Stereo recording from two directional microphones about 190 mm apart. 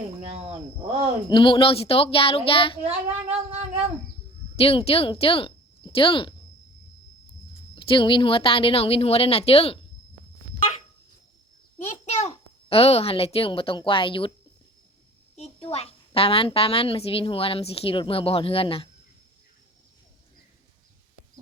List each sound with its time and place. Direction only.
0.3 s speech: 30° right (ahead or behind)
1.3 s a child's voice: 25° left (ahead or behind)
4.5 s speech: 30° left (ahead or behind)
7.8 s a child's voice: 25° left (ahead or behind)
11.8 s a child's voice: 35° left (ahead or behind)
15.4 s a child's voice: 30° left (ahead or behind)